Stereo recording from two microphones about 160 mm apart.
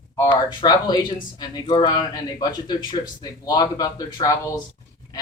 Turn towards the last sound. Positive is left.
turn(degrees=25)  # may be behind; listen again after turning